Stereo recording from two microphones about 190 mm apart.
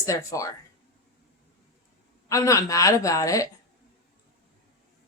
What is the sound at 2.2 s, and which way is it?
Speech, 15° left (ahead or behind).